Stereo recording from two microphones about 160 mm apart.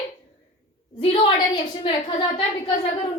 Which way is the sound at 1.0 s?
30° left (ahead or behind).